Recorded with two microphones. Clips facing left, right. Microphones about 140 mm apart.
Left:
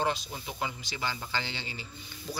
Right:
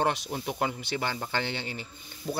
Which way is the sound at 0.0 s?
65° right (ahead or behind).